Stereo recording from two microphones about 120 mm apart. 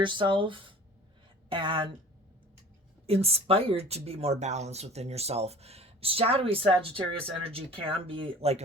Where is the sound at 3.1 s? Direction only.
55° right (ahead or behind).